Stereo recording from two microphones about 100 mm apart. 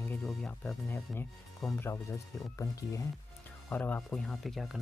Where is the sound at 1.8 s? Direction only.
25° left (ahead or behind).